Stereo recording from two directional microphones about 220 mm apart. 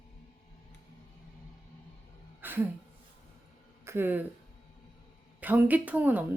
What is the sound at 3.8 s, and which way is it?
Speech, 10° right (ahead or behind).